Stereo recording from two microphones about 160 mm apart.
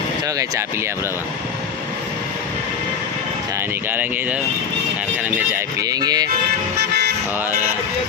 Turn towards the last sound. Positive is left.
turn(degrees=-25)  # may be behind; listen again after turning